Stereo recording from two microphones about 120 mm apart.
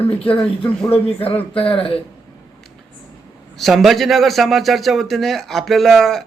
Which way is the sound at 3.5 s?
Centre (ahead or behind).